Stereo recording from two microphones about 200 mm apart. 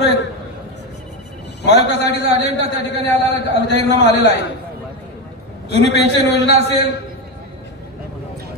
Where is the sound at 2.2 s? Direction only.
30° right (ahead or behind).